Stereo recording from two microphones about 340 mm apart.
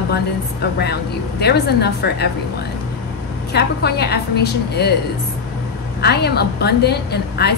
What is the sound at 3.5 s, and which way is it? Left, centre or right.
A woman's voice, left.